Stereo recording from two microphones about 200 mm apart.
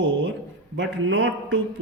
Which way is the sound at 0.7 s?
65° right (ahead or behind).